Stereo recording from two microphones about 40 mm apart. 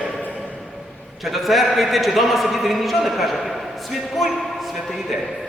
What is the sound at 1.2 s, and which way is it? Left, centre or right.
A man's voice, centre.